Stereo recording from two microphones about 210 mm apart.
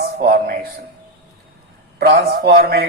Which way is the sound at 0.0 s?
45° right (ahead or behind).